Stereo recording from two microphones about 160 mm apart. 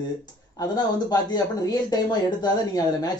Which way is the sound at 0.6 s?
25° left (ahead or behind).